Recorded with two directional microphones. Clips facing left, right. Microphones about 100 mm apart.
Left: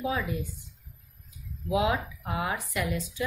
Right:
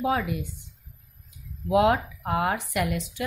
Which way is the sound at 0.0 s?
65° right (ahead or behind).